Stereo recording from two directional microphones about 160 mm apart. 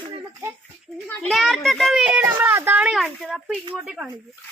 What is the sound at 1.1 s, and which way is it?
A woman's voice, centre (ahead or behind).